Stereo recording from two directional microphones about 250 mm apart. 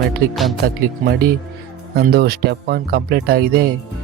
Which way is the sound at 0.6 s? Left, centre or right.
Right.